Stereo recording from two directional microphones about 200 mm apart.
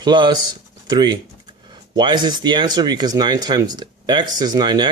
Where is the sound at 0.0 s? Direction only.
20° right (ahead or behind).